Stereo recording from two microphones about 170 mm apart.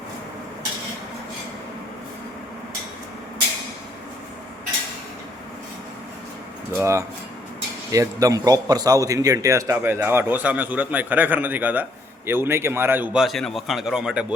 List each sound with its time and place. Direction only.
6.7 s a man's voice: 15° right (ahead or behind)
13.2 s speech: centre (ahead or behind)